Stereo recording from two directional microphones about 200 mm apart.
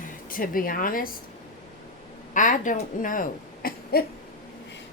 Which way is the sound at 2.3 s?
40° left (ahead or behind).